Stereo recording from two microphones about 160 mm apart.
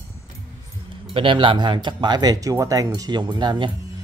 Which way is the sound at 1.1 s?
30° right (ahead or behind).